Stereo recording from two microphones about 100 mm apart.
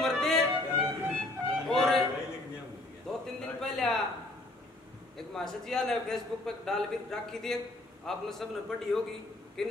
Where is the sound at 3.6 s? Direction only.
5° left (ahead or behind).